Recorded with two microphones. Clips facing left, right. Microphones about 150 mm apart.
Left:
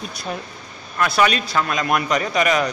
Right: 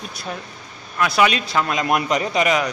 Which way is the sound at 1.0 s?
15° right (ahead or behind).